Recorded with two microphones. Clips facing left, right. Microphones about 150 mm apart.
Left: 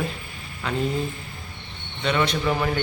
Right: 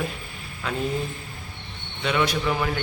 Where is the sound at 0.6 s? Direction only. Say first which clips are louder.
Left 2 dB; centre (ahead or behind).